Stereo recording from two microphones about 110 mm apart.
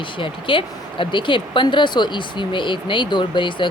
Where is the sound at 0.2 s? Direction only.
50° left (ahead or behind).